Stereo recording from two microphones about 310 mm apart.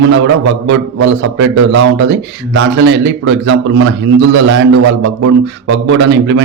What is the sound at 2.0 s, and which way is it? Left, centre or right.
A man's voice, right.